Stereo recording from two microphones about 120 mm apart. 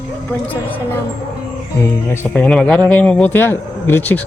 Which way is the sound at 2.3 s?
10° left (ahead or behind).